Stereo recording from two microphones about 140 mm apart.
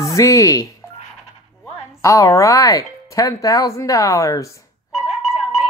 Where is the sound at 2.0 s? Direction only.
20° left (ahead or behind).